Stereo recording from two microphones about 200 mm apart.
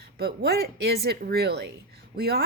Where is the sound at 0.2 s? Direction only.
55° right (ahead or behind).